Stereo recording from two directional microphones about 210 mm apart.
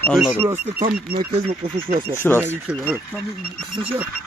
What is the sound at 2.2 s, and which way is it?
Speech, 10° left (ahead or behind).